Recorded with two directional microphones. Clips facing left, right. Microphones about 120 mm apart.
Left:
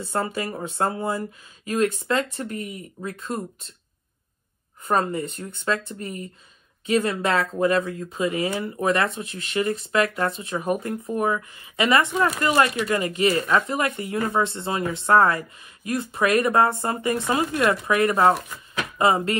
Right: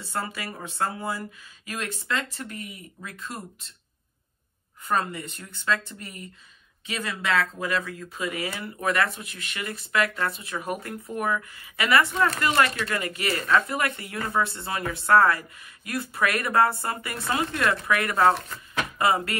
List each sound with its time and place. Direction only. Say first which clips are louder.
0.1 s speech: left 5 dB; 30° left (ahead or behind)
4.8 s speech: left 4 dB; 35° left (ahead or behind)
18.3 s speech: left 3 dB; centre (ahead or behind)
18.9 s speech: left 4 dB; 25° left (ahead or behind)